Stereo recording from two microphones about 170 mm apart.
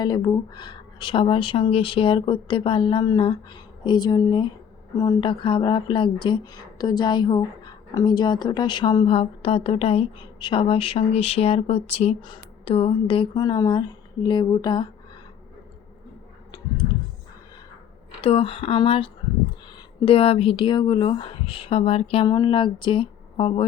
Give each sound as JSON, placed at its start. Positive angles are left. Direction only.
{"t": 0.0, "sound": "speech", "side_deg": 25}
{"t": 18.2, "sound": "speech", "side_deg": 35}